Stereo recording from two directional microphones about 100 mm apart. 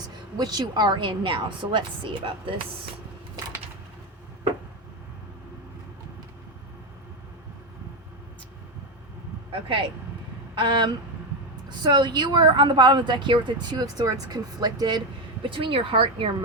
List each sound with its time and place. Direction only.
0.3 s speech: 40° right (ahead or behind)
9.5 s speech: 60° right (ahead or behind)
10.5 s speech: 50° right (ahead or behind)
15.4 s speech: 60° right (ahead or behind)